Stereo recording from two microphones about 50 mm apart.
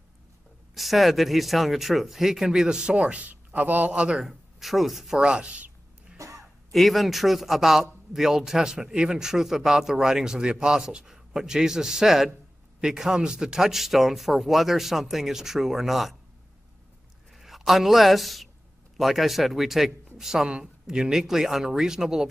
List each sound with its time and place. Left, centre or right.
0.7 s speech: centre; by 4.0 s right
4.2 s speech: centre
5.2 s a sound: centre
6.1 s throat clearing: right
6.7 s a man's voice: centre
17.3 s a man's voice: centre